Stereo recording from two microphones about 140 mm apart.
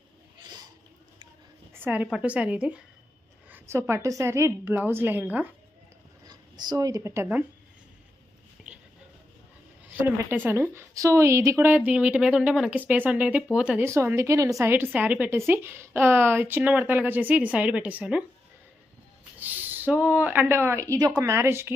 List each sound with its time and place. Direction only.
1.7 s a sound: 15° right (ahead or behind)
2.0 s a woman's voice: 5° right (ahead or behind)
3.5 s a woman's voice: 20° right (ahead or behind)
6.2 s speech: 30° right (ahead or behind)
10.0 s a woman's voice: 15° right (ahead or behind)
11.9 s a woman's voice: 10° right (ahead or behind)
13.8 s a woman's voice: 20° right (ahead or behind)
19.4 s a woman's voice: 15° right (ahead or behind)